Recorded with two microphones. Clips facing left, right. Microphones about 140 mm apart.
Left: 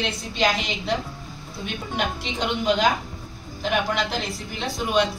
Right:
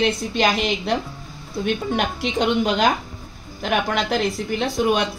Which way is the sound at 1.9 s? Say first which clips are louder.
Right 5 dB; 50° right (ahead or behind).